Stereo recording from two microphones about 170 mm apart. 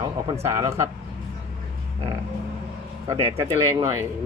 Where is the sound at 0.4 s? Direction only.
15° right (ahead or behind).